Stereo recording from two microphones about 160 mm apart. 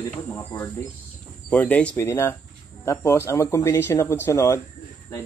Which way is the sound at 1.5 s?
10° left (ahead or behind).